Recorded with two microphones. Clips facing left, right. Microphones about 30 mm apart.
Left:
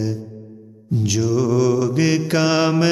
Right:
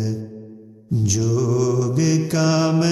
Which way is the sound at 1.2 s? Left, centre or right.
Left.